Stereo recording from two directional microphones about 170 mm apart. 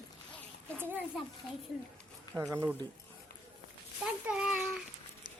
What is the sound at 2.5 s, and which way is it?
Speech, 10° right (ahead or behind).